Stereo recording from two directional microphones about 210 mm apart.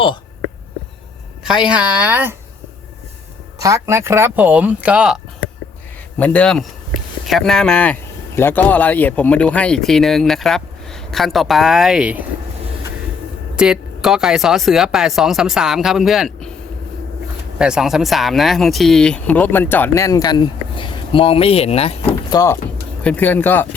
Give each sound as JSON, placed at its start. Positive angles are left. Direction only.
{"t": 1.6, "sound": "speech", "side_deg": -5}
{"t": 3.6, "sound": "speech", "side_deg": -15}
{"t": 6.1, "sound": "speech", "side_deg": 5}
{"t": 13.6, "sound": "speech", "side_deg": -5}
{"t": 17.6, "sound": "speech", "side_deg": -5}
{"t": 23.0, "sound": "speech", "side_deg": 10}